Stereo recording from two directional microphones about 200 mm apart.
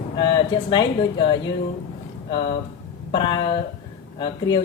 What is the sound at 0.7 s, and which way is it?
Speech, 20° left (ahead or behind).